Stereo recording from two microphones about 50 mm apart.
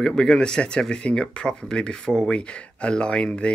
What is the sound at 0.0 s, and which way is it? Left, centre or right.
Speech, centre.